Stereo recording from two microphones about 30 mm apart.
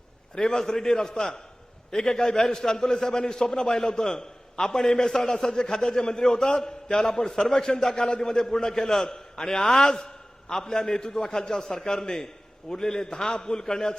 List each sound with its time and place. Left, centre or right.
0.3 s a man's voice: left